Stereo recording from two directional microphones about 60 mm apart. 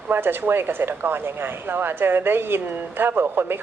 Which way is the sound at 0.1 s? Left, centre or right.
Right.